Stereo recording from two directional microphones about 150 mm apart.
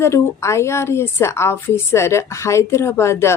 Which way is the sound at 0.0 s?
20° left (ahead or behind).